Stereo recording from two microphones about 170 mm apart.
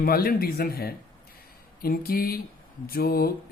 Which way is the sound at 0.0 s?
60° left (ahead or behind).